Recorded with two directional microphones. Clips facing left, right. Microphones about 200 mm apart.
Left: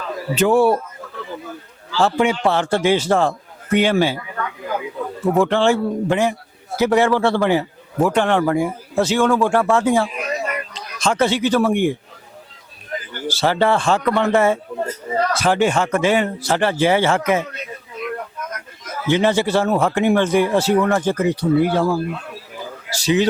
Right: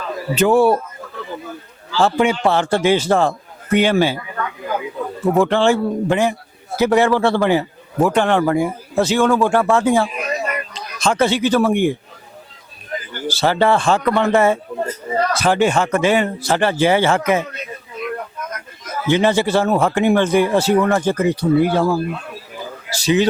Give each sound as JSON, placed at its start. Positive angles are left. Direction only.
{"t": 0.0, "sound": "a sound", "side_deg": -15}
{"t": 0.3, "sound": "speech", "side_deg": -5}
{"t": 0.8, "sound": "bird", "side_deg": -20}
{"t": 1.9, "sound": "a man's voice", "side_deg": -10}
{"t": 5.5, "sound": "a man's voice", "side_deg": -10}
{"t": 22.3, "sound": "a sound", "side_deg": -20}
{"t": 22.9, "sound": "a man's voice", "side_deg": -5}